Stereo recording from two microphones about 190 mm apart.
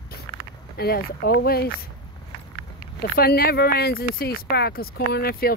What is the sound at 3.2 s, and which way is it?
Speech, 55° left (ahead or behind).